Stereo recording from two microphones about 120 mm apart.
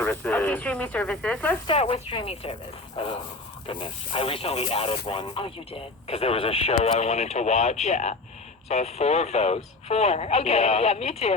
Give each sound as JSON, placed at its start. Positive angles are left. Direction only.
{"t": 0.0, "sound": "speech", "side_deg": 10}
{"t": 1.6, "sound": "speech", "side_deg": 55}
{"t": 3.7, "sound": "speech", "side_deg": 45}